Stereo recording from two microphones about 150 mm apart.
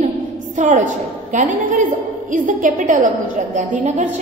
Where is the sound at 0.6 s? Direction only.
55° right (ahead or behind).